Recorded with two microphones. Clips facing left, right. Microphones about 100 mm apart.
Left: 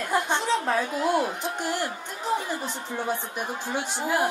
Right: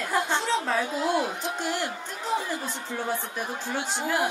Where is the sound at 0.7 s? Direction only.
20° right (ahead or behind).